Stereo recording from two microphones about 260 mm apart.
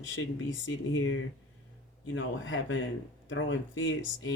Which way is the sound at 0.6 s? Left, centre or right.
Left.